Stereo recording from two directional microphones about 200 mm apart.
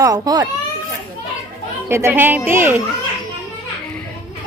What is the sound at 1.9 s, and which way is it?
Speech, 15° right (ahead or behind).